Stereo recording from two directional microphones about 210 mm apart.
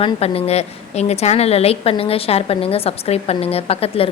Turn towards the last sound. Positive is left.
turn(degrees=25)  # may be behind; listen again after turning